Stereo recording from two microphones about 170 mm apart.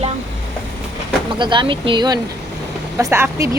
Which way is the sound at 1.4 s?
30° right (ahead or behind).